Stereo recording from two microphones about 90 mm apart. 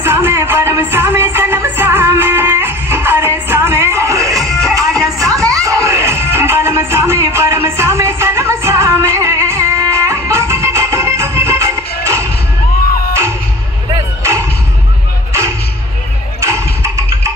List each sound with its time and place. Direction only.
0.0 s music: 25° right (ahead or behind)
14.2 s a sound: 30° right (ahead or behind)
16.3 s music: 35° right (ahead or behind)